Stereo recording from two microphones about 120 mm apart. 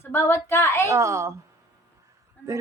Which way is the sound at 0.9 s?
25° right (ahead or behind).